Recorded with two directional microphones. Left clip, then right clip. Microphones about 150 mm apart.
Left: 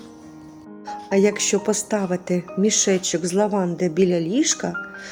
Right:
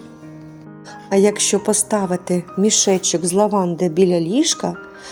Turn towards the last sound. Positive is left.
turn(degrees=-25)  # may be behind; listen again after turning